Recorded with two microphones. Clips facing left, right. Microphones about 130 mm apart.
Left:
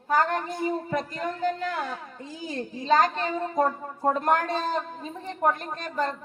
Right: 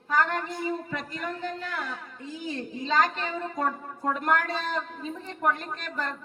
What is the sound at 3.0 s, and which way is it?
A woman's voice, 35° left (ahead or behind).